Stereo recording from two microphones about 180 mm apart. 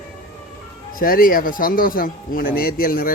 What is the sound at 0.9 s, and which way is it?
Speech, 50° left (ahead or behind).